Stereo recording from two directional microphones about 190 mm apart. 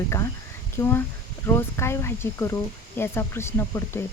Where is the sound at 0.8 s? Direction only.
10° left (ahead or behind).